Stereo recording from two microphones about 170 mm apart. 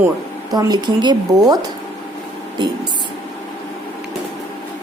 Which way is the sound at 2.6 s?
25° right (ahead or behind).